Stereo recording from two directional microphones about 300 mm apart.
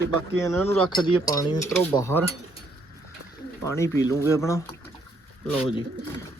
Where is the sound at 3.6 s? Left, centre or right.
Centre.